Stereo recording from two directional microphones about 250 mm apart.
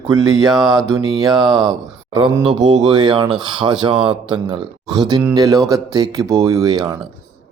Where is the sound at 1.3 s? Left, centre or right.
Centre.